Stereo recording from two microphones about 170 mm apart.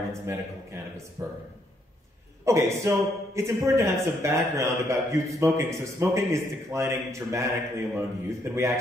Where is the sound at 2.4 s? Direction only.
15° right (ahead or behind).